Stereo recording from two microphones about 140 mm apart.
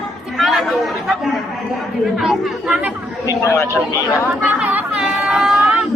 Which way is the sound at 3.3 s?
20° left (ahead or behind).